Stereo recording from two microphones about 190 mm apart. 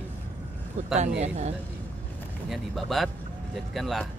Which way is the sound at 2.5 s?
Centre (ahead or behind).